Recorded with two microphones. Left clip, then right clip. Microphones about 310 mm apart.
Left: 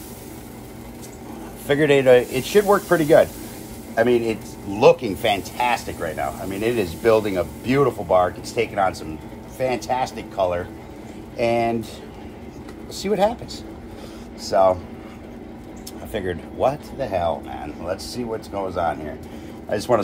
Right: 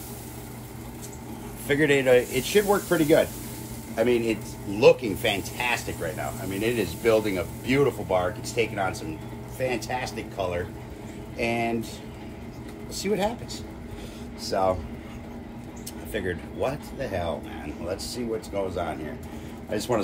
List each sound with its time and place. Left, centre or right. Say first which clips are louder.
1.7 s speech: left 5 dB; left
12.9 s speech: left 7 dB; left
14.4 s speech: left 8 dB; left
16.1 s speech: left 3 dB; left